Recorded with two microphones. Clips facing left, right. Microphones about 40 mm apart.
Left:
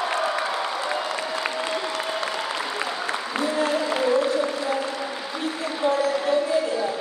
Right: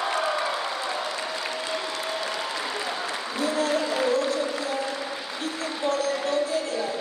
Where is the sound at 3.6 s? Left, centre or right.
Centre.